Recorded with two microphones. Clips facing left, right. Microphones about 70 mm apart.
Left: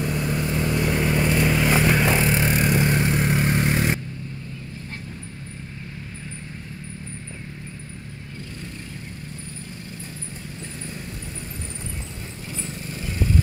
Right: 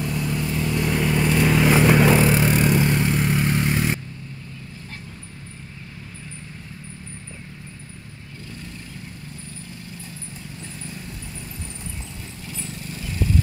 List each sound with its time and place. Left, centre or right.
0.1 s vehicle: left
0.7 s vehicle: centre